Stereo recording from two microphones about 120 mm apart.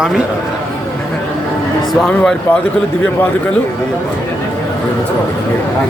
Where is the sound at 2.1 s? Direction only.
10° left (ahead or behind).